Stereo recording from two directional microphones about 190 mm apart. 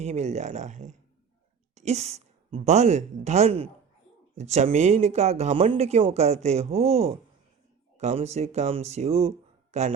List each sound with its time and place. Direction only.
0.0 s a woman's voice: 35° right (ahead or behind)